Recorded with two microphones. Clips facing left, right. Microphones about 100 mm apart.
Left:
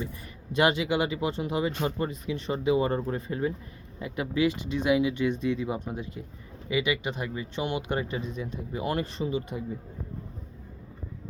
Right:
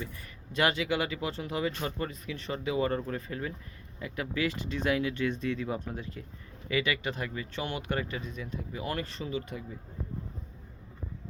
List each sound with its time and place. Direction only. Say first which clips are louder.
0.5 s speech: left 4 dB; 20° left (ahead or behind)